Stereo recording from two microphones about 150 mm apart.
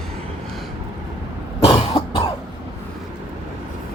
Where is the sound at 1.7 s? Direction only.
30° left (ahead or behind).